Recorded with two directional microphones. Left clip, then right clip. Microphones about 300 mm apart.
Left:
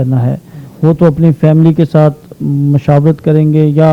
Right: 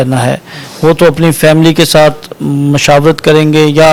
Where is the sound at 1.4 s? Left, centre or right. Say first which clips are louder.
Right 6 dB; centre.